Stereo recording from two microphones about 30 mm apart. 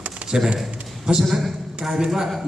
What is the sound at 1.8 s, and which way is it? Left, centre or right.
Speech, right.